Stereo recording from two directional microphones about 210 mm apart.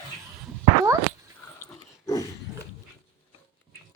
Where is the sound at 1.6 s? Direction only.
15° left (ahead or behind).